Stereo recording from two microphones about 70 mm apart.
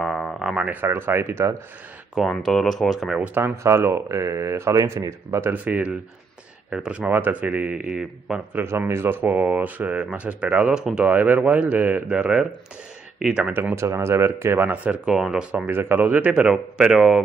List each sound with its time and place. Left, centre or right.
0.0 s a sound: centre
0.6 s speech: right
0.8 s speech: right
2.1 s speech: centre
3.2 s speech: right
5.5 s speech: centre
7.0 s speech: right
8.5 s speech: right; by 10.9 s centre
11.1 s speech: right
13.7 s speech: right
14.7 s speech: centre
15.1 s speech: centre
15.6 s speech: right; by 17.2 s centre